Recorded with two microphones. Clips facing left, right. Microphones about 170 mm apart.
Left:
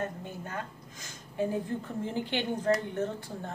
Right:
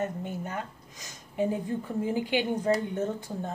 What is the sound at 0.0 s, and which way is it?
Speech, 20° right (ahead or behind).